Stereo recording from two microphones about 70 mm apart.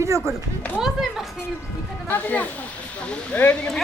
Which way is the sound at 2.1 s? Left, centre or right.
Left.